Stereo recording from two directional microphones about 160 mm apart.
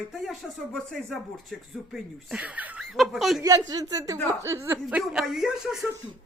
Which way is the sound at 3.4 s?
25° right (ahead or behind).